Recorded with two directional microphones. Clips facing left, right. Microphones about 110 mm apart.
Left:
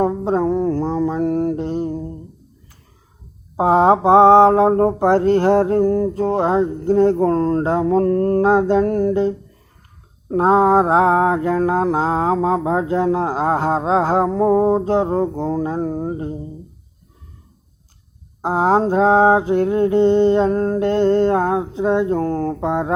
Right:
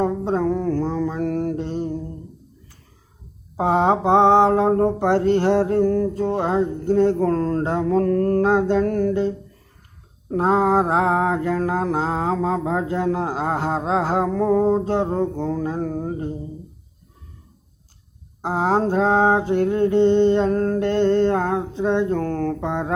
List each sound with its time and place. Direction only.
0.0 s mantra: 35° left (ahead or behind)
3.6 s mantra: 35° left (ahead or behind)
6.8 s mantra: 40° left (ahead or behind)
18.4 s mantra: 30° left (ahead or behind)